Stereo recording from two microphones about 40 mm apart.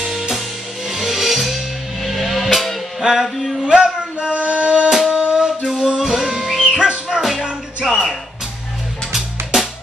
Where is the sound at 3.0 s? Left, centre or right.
Centre.